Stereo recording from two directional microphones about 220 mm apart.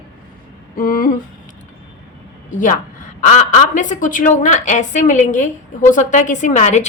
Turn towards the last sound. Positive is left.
turn(degrees=30)  # may be behind; listen again after turning